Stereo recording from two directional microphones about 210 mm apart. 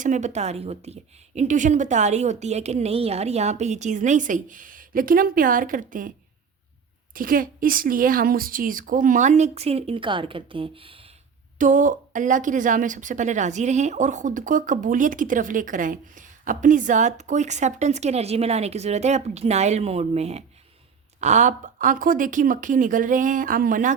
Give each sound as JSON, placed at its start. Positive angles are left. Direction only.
{"t": 0.0, "sound": "speech", "side_deg": -35}
{"t": 11.5, "sound": "speech", "side_deg": -40}